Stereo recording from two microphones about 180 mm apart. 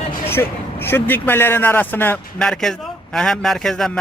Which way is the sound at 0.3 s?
10° left (ahead or behind).